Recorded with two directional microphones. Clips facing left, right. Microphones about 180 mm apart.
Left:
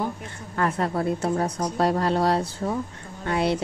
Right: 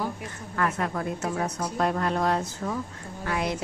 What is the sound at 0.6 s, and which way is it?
A woman's voice, 30° left (ahead or behind).